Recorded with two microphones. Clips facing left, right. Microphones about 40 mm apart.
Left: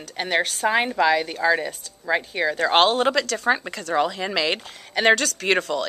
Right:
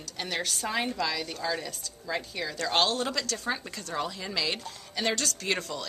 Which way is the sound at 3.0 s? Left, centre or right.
Left.